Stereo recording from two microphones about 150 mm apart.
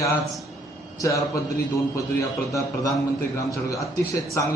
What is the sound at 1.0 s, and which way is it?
Speech, 20° left (ahead or behind).